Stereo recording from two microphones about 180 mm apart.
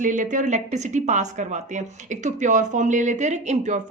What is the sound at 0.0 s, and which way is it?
A woman's voice, 45° right (ahead or behind).